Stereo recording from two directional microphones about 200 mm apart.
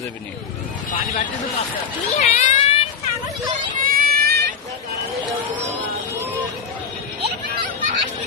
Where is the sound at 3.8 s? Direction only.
45° right (ahead or behind).